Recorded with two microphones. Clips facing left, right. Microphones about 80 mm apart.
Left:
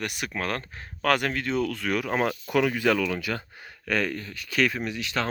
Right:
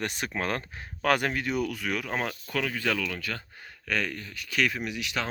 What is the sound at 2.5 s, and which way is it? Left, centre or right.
Speech, centre.